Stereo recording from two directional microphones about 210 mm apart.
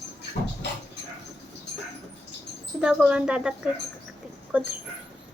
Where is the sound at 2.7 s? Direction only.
5° right (ahead or behind).